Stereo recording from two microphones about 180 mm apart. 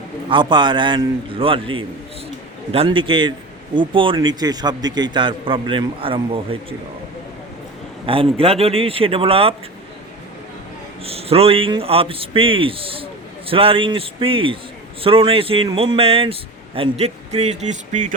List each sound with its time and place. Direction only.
0.3 s a man's voice: 25° right (ahead or behind)
8.0 s a man's voice: 30° right (ahead or behind)
11.0 s a man's voice: 35° right (ahead or behind)